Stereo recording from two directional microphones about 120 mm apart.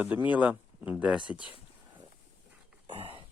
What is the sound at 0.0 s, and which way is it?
Speech, 15° right (ahead or behind).